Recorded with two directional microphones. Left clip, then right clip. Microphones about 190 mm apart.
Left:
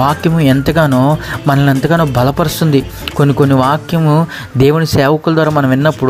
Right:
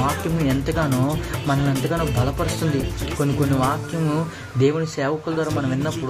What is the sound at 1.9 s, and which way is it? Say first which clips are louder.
Speech: left 12 dB; 35° left (ahead or behind).